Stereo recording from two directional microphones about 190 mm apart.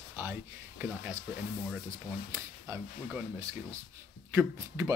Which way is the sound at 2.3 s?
15° right (ahead or behind).